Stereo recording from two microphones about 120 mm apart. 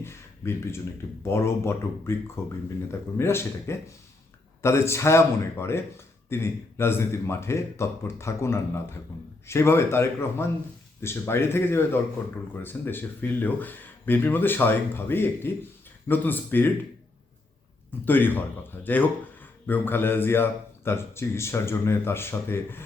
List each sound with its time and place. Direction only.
0.0 s a sound: 20° left (ahead or behind)
1.2 s a man's voice: 20° left (ahead or behind)
18.0 s a man's voice: 15° left (ahead or behind)